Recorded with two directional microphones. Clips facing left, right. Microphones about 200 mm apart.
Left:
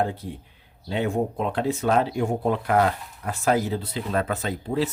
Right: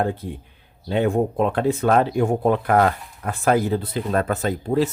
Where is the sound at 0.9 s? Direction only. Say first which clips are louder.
Right 5 dB; 55° right (ahead or behind).